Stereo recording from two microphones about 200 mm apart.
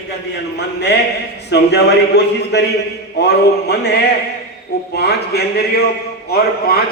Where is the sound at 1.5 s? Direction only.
55° left (ahead or behind).